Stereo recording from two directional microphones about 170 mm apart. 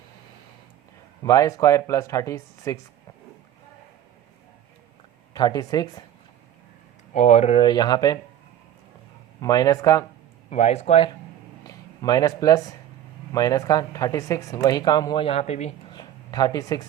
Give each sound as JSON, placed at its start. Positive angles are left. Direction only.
{"t": 1.2, "sound": "speech", "side_deg": 20}
{"t": 5.3, "sound": "speech", "side_deg": 25}
{"t": 7.1, "sound": "speech", "side_deg": 40}
{"t": 7.6, "sound": "speech", "side_deg": 25}
{"t": 9.4, "sound": "speech", "side_deg": 20}
{"t": 10.5, "sound": "speech", "side_deg": 40}
{"t": 11.7, "sound": "speech", "side_deg": 20}
{"t": 15.9, "sound": "a sound", "side_deg": 25}